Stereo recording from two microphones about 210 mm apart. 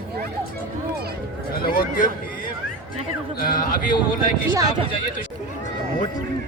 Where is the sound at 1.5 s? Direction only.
45° left (ahead or behind).